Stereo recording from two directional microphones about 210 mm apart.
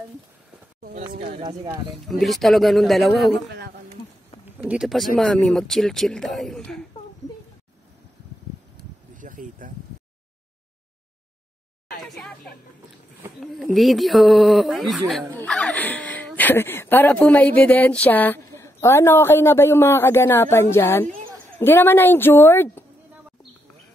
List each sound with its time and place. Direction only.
1.1 s speech: 45° right (ahead or behind)
1.4 s speech: 20° right (ahead or behind)
2.0 s speech: centre (ahead or behind)
4.5 s speech: 5° right (ahead or behind)
9.1 s a sound: 40° right (ahead or behind)
13.4 s a woman's voice: centre (ahead or behind)